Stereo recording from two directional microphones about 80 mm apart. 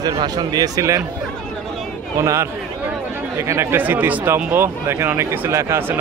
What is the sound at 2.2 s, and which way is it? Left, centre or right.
Speech, right.